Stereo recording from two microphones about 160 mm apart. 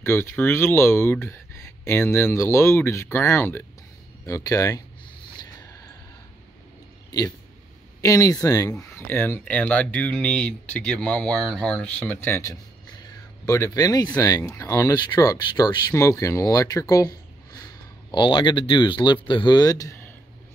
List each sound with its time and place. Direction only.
0.0 s speech: 15° left (ahead or behind)
7.1 s speech: 25° left (ahead or behind)
18.1 s speech: 30° left (ahead or behind)